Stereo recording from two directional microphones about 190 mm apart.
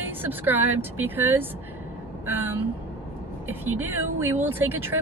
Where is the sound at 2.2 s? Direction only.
10° right (ahead or behind).